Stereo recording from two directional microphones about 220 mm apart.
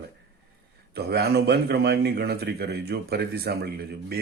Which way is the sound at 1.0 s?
45° right (ahead or behind).